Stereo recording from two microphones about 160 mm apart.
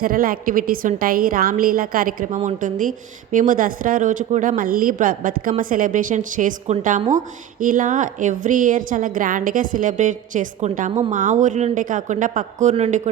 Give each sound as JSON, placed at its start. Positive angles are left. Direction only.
{"t": 0.0, "sound": "a woman's voice", "side_deg": -65}